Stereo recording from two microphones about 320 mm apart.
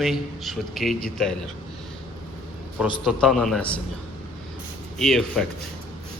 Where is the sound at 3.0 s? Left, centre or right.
Centre.